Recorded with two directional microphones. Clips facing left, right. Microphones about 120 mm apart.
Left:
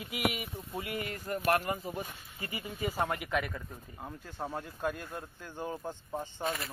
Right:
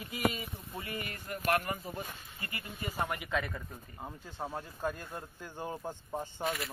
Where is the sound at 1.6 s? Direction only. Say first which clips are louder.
Left 3 dB; 15° left (ahead or behind).